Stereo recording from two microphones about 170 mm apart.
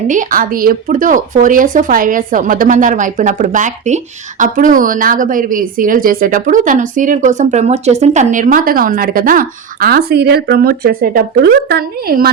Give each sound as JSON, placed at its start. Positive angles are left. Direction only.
{"t": 0.1, "sound": "speech", "side_deg": -50}